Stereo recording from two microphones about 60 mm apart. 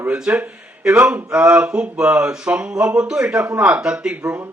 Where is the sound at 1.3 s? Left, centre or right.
Centre.